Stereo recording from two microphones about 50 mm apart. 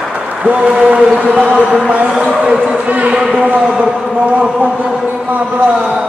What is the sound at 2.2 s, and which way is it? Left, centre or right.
A man's voice, right.